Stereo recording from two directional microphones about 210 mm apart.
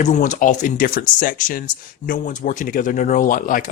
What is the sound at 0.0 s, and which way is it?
Speech, 35° left (ahead or behind).